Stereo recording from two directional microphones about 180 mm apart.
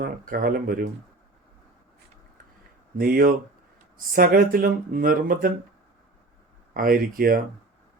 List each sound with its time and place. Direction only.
0.0 s speech: 55° right (ahead or behind)
3.0 s speech: 50° right (ahead or behind)
6.7 s speech: 50° right (ahead or behind)